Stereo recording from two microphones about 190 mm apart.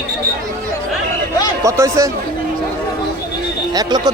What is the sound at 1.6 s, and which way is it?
Speech, 15° right (ahead or behind).